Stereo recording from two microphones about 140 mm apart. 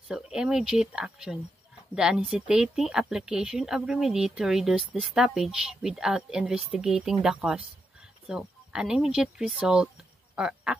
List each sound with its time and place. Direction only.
0.1 s speech: 5° right (ahead or behind)